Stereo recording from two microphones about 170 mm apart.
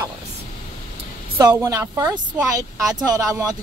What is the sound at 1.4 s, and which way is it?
A woman's voice, 20° right (ahead or behind).